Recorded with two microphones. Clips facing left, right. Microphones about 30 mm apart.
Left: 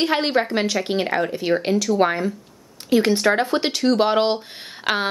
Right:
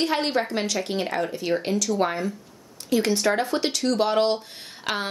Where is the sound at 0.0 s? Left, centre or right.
Left.